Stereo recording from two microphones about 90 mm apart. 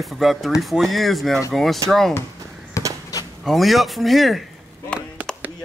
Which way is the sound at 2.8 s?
35° left (ahead or behind).